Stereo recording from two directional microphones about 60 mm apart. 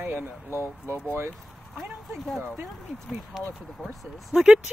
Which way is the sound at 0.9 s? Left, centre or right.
Right.